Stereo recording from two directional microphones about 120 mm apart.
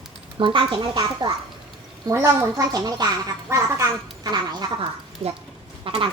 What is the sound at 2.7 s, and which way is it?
A woman's voice, 35° right (ahead or behind).